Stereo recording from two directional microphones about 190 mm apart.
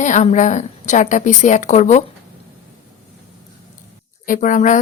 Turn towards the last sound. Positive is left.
turn(degrees=40)  # may be behind; listen again after turning